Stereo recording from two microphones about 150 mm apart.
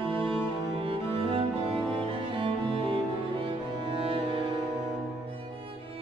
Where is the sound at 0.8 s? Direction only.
35° right (ahead or behind).